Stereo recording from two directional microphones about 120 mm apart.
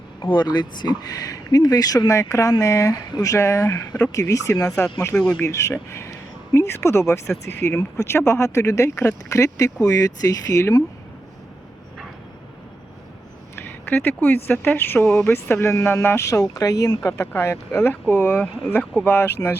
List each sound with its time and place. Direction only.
0.2 s speech: 40° left (ahead or behind)
13.6 s speech: 15° left (ahead or behind)